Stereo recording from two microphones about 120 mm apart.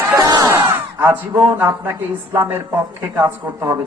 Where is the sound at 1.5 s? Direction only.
20° right (ahead or behind).